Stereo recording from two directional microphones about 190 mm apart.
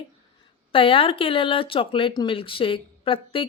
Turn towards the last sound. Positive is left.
turn(degrees=30)  # may be behind; listen again after turning